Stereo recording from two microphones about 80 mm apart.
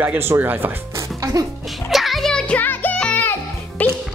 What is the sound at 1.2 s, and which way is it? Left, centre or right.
Music, right.